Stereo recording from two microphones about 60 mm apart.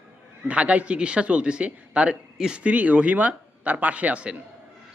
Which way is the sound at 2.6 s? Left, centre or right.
Right.